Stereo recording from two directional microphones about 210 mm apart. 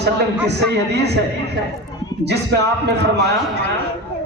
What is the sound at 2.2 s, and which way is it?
Speech, 55° right (ahead or behind).